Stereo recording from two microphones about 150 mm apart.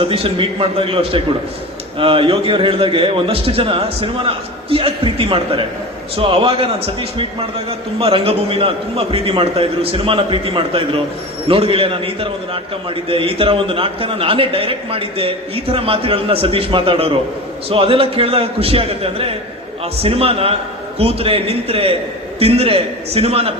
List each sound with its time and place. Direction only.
0.0 s a man's voice: 40° right (ahead or behind)